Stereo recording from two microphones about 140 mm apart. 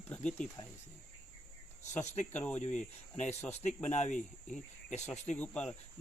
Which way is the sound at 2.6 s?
55° left (ahead or behind).